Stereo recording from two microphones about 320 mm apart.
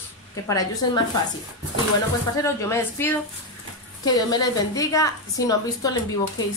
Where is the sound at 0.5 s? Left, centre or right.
Centre.